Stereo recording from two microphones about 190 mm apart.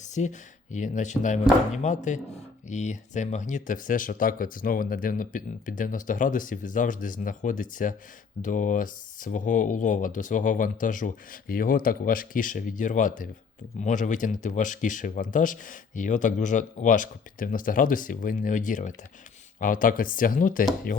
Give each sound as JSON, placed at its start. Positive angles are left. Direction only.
{"t": 0.0, "sound": "speech", "side_deg": 40}